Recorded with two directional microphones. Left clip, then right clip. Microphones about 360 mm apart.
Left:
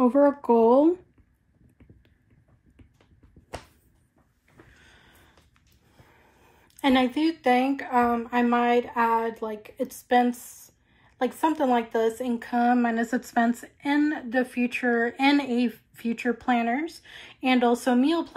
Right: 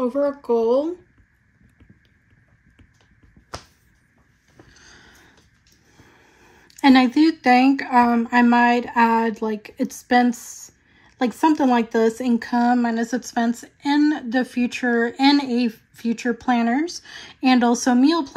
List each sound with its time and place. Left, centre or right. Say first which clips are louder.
0.0 s speech: left 1 dB; centre
6.7 s a sound: right 7 dB; centre
7.2 s speech: right 6 dB; centre